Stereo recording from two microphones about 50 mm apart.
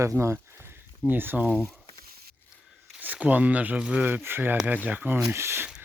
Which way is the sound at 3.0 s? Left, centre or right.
Right.